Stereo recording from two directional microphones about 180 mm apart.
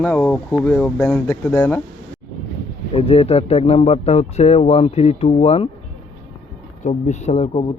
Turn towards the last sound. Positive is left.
turn(degrees=35)  # may be behind; listen again after turning